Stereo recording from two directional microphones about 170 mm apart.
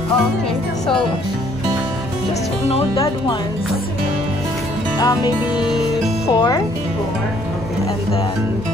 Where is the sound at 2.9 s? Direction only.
25° left (ahead or behind).